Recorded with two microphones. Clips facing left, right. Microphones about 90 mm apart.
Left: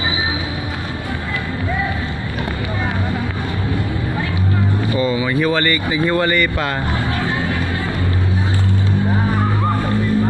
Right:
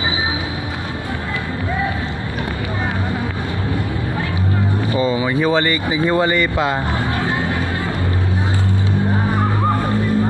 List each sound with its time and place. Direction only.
4.9 s speech: 25° right (ahead or behind)